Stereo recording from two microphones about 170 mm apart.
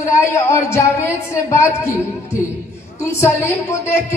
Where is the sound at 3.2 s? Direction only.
15° left (ahead or behind).